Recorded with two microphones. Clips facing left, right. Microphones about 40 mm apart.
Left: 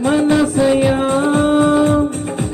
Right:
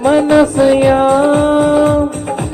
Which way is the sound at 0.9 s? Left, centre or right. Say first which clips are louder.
Right 5 dB; right.